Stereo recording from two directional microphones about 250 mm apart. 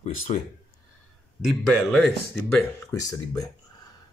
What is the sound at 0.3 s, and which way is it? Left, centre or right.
Speech, left.